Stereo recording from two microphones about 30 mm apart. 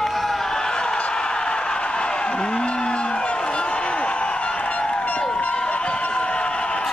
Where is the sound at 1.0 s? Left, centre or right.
Left.